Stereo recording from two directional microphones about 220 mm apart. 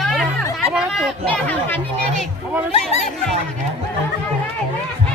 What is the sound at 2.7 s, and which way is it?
Speech, 30° left (ahead or behind).